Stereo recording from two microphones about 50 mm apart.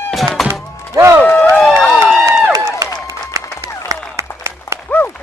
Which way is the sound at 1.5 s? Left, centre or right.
Centre.